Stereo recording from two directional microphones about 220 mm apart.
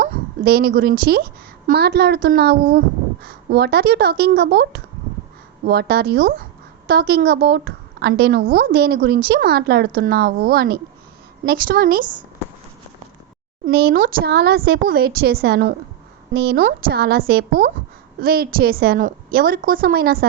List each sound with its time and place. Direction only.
0.0 s a woman's voice: 45° right (ahead or behind)
13.7 s a woman's voice: 45° right (ahead or behind)